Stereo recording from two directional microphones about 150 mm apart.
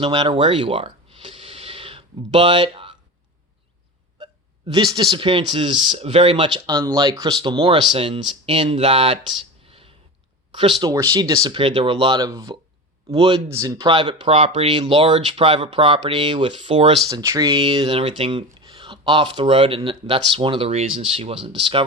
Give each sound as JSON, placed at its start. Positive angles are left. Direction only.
{"t": 0.0, "sound": "a sound", "side_deg": -35}
{"t": 4.2, "sound": "a sound", "side_deg": -30}
{"t": 5.1, "sound": "speech", "side_deg": -35}
{"t": 10.8, "sound": "speech", "side_deg": -25}
{"t": 17.1, "sound": "speech", "side_deg": -25}
{"t": 17.6, "sound": "speech", "side_deg": -40}